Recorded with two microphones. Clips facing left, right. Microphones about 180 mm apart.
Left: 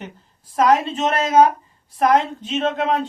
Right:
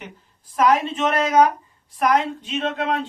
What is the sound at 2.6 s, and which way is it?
Speech, 45° left (ahead or behind).